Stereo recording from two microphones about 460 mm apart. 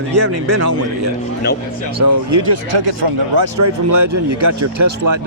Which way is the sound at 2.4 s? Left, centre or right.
Right.